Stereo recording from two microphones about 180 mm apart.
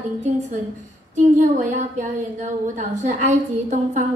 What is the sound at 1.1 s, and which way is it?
A woman's voice, 40° right (ahead or behind).